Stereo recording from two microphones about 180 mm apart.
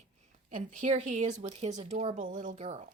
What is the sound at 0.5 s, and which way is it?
A woman's voice, 45° right (ahead or behind).